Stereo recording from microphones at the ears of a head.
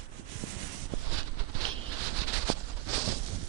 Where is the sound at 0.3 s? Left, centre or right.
Right.